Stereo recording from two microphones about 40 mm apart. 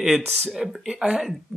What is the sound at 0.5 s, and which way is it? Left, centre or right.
Speech, centre.